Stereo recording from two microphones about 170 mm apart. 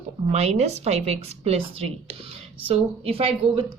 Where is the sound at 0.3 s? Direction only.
40° right (ahead or behind).